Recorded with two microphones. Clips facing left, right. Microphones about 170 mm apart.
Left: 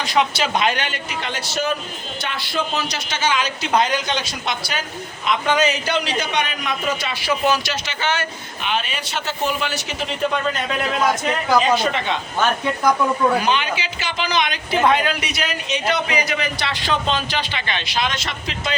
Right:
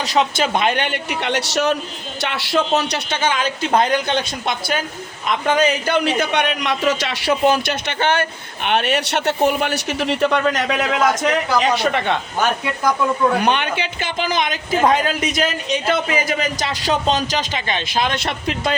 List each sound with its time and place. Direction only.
0.0 s a man's voice: 40° right (ahead or behind); by 11.0 s 75° right (ahead or behind)
11.6 s a man's voice: 60° right (ahead or behind)
13.4 s a man's voice: 60° right (ahead or behind)